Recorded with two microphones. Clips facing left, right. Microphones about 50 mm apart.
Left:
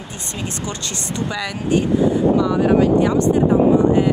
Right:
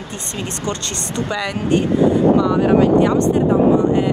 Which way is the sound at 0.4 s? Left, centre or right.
Right.